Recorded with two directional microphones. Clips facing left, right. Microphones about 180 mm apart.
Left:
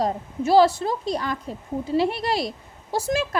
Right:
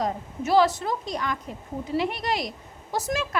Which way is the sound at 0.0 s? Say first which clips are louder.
Left 4 dB; 30° left (ahead or behind).